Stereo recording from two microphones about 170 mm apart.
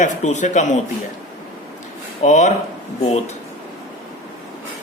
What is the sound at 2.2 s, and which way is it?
Speech, 45° left (ahead or behind).